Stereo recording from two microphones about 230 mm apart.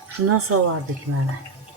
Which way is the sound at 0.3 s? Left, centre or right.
Right.